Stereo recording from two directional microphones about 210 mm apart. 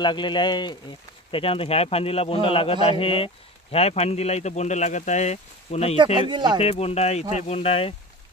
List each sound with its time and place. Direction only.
0.0 s speech: 20° left (ahead or behind)
6.1 s speech: 20° right (ahead or behind)
6.6 s speech: 30° left (ahead or behind)